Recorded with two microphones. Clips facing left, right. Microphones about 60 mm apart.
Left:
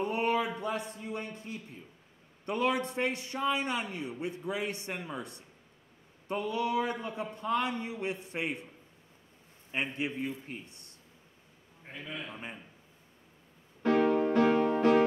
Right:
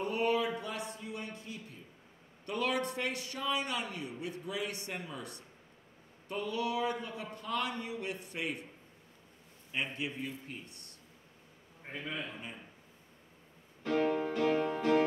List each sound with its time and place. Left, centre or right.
0.0 s a sound: left
2.4 s a man's voice: left
9.7 s a man's voice: left
11.9 s a man's voice: right
12.3 s a man's voice: left
13.8 s music: left